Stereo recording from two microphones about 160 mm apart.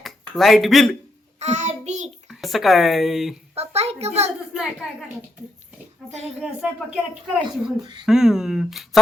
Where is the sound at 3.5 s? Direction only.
40° right (ahead or behind).